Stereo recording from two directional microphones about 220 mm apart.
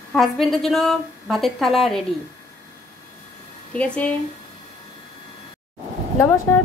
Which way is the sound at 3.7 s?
5° left (ahead or behind).